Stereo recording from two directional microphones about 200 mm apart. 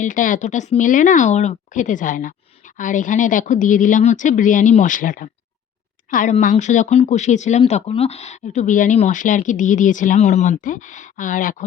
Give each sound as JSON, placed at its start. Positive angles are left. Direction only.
{"t": 0.0, "sound": "a woman's voice", "side_deg": 40}